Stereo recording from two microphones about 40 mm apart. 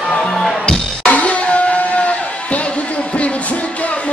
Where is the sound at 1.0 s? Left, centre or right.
Left.